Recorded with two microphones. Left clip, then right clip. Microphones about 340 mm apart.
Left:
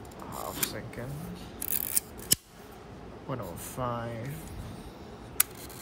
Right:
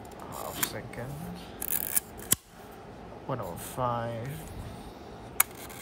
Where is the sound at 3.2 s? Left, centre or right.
Centre.